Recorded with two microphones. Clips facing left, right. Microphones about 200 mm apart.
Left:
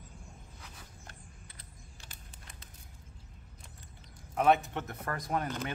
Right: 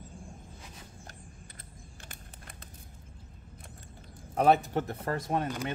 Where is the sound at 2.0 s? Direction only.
55° right (ahead or behind).